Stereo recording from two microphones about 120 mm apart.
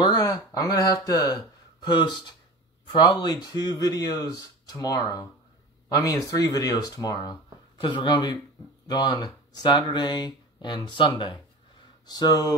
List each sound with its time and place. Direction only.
0.0 s speech: 35° left (ahead or behind)